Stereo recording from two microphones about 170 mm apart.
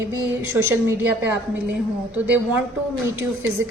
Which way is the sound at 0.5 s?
10° right (ahead or behind).